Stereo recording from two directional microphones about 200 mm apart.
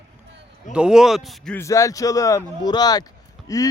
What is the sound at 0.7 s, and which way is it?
Speech, 5° right (ahead or behind).